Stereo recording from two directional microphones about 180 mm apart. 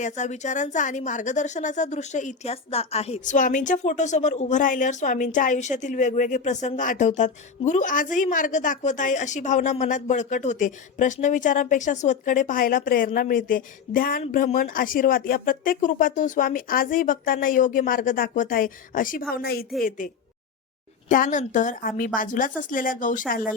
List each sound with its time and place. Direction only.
0.0 s a woman's voice: 40° left (ahead or behind); by 19.6 s 60° left (ahead or behind)
20.0 s a woman's voice: 45° left (ahead or behind)